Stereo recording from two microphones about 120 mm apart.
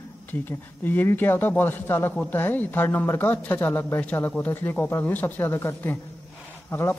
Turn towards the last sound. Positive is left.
turn(degrees=20)  # may be behind; listen again after turning